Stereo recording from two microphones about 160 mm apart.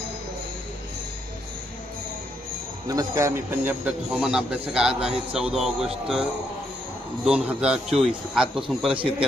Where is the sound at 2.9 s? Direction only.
20° right (ahead or behind); by 6.2 s centre (ahead or behind).